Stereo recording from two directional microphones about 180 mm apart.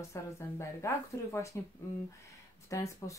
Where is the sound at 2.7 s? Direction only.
15° left (ahead or behind).